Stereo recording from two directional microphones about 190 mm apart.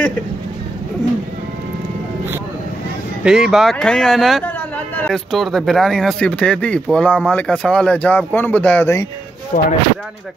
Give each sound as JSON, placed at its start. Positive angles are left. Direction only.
{"t": 3.3, "sound": "speech", "side_deg": -5}
{"t": 9.5, "sound": "speech", "side_deg": 35}